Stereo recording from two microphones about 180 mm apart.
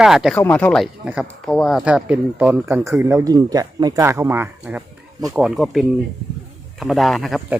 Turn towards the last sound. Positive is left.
turn(degrees=0)  # may be behind; listen again after turning